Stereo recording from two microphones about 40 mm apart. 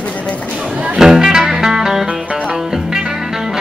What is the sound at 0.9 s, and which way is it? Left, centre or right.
Music, centre.